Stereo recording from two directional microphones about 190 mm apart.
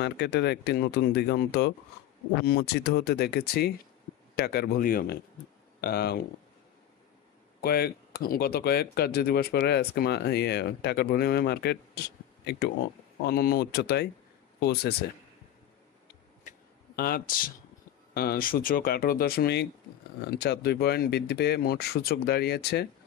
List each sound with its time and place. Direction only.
0.0 s speech: 60° left (ahead or behind)
7.6 s speech: 55° left (ahead or behind)
16.4 s a sound: 50° left (ahead or behind)
18.1 s speech: 55° left (ahead or behind)